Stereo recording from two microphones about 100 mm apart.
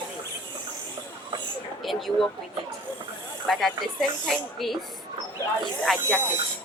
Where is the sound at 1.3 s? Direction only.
50° right (ahead or behind).